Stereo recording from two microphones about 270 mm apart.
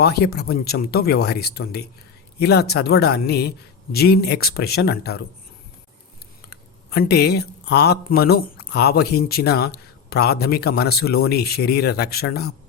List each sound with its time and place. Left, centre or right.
0.0 s speech: left
6.5 s speech: left